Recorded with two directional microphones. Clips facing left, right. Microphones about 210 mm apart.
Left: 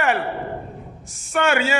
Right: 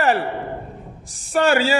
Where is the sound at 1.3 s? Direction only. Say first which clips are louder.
Right 3 dB; 35° right (ahead or behind).